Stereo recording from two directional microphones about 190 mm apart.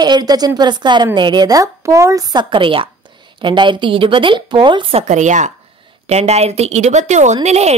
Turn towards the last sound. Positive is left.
turn(degrees=-35)  # may be behind; listen again after turning